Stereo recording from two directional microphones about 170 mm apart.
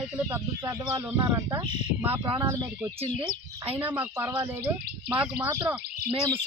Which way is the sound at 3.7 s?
10° right (ahead or behind).